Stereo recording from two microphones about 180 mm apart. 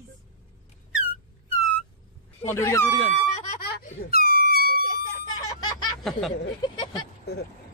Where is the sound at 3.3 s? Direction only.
45° left (ahead or behind).